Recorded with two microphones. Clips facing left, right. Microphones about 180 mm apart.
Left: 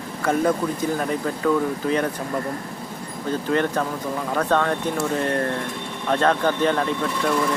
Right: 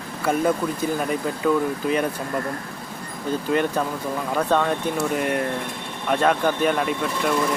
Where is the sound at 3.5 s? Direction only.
15° right (ahead or behind).